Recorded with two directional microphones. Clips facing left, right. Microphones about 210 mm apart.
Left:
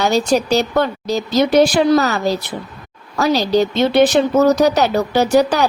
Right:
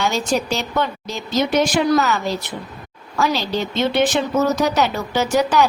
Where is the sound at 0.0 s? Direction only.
40° left (ahead or behind).